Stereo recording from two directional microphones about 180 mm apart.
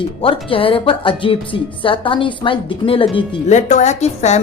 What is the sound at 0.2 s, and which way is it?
A woman's voice, 30° left (ahead or behind).